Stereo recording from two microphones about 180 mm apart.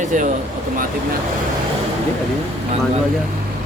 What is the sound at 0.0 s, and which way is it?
Speech, 45° right (ahead or behind).